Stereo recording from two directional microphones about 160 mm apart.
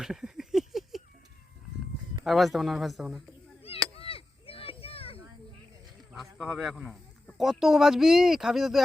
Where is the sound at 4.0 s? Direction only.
35° left (ahead or behind).